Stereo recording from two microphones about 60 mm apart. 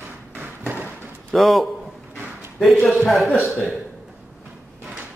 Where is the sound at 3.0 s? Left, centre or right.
Centre.